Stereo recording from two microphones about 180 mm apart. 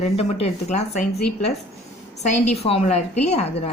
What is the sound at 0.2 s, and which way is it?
Speech, 35° left (ahead or behind).